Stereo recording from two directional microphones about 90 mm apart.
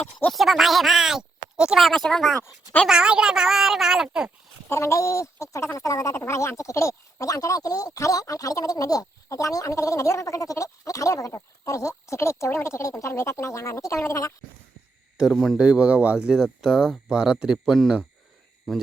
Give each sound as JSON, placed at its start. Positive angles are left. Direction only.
{"t": 0.3, "sound": "speech", "side_deg": 0}
{"t": 2.8, "sound": "speech", "side_deg": -10}
{"t": 4.7, "sound": "speech", "side_deg": 35}
{"t": 15.2, "sound": "speech", "side_deg": 0}
{"t": 15.5, "sound": "speech", "side_deg": -10}
{"t": 18.7, "sound": "speech", "side_deg": 0}